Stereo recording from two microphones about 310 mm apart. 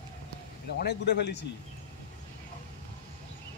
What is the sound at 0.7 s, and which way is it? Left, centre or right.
Speech, left.